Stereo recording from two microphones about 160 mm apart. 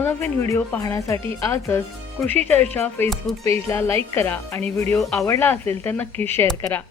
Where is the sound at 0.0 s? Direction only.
15° left (ahead or behind).